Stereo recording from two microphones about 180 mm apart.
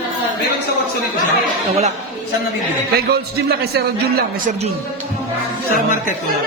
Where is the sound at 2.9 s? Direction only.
60° right (ahead or behind).